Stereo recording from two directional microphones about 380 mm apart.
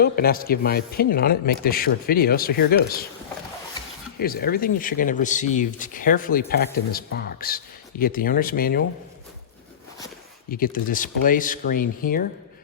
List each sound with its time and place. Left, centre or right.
0.0 s speech: left
4.2 s speech: left
10.5 s speech: left